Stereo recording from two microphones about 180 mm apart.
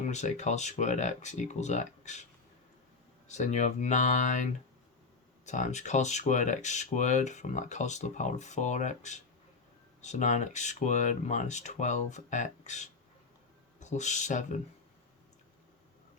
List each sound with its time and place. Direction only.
0.1 s speech: 40° left (ahead or behind)
3.2 s speech: 40° left (ahead or behind)
5.5 s speech: 40° left (ahead or behind)